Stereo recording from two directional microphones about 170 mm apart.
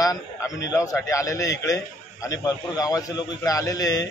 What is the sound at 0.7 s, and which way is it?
A man's voice, 20° left (ahead or behind).